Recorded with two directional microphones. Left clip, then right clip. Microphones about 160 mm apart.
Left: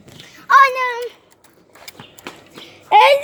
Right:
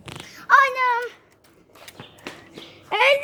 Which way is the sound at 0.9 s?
15° right (ahead or behind).